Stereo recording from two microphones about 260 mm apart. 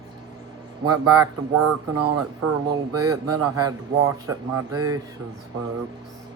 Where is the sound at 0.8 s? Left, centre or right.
Right.